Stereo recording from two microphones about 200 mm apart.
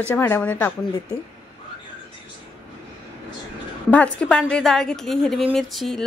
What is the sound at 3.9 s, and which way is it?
A woman's voice, 5° left (ahead or behind).